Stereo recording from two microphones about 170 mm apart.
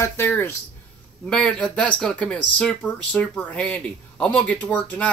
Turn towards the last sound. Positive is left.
turn(degrees=10)  # may be behind; listen again after turning